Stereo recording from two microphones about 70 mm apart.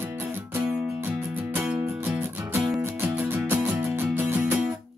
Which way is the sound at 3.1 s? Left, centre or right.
Right.